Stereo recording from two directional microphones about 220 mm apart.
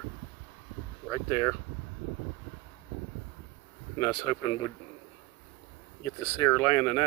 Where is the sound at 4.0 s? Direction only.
15° left (ahead or behind).